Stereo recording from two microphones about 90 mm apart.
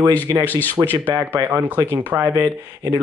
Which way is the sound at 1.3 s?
20° right (ahead or behind).